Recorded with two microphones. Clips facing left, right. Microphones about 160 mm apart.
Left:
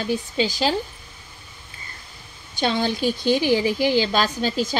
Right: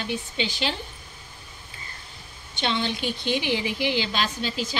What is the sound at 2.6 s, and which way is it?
A woman's voice, 45° left (ahead or behind).